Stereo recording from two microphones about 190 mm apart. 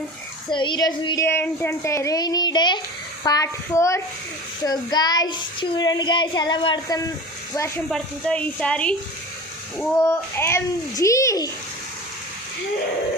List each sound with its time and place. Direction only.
0.5 s a child's voice: 25° left (ahead or behind)
7.9 s a woman's voice: centre (ahead or behind)
10.0 s a child's voice: 15° left (ahead or behind)